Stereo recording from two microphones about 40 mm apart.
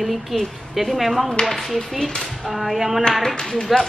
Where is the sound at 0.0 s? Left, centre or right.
Centre.